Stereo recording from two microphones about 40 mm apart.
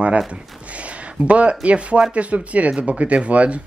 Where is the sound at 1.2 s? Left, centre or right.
Right.